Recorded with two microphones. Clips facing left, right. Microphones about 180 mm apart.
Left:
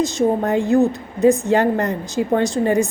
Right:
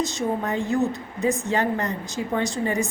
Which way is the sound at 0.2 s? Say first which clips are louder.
Left 8 dB; 55° left (ahead or behind).